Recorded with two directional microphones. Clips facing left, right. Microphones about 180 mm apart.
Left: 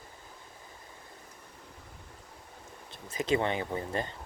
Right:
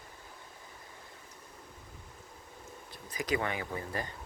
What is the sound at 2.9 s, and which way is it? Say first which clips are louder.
Speech: left 4 dB; 25° left (ahead or behind).